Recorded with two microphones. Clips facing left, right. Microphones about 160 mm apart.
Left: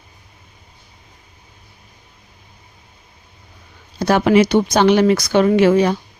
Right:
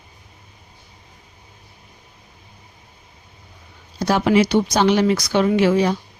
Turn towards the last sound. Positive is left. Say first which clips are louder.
# left 3 dB
turn(degrees=55)  # may be behind; listen again after turning